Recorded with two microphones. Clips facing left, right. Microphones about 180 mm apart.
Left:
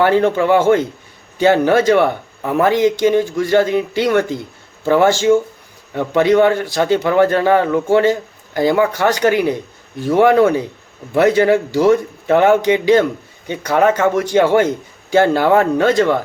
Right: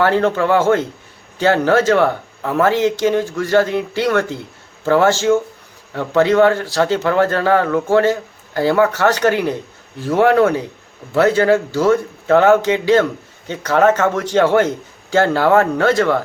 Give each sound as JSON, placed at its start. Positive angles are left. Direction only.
{"t": 0.0, "sound": "a man's voice", "side_deg": 15}